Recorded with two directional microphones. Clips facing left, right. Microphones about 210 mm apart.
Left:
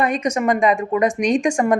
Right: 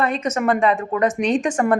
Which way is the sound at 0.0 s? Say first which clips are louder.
Left 1 dB; 15° left (ahead or behind).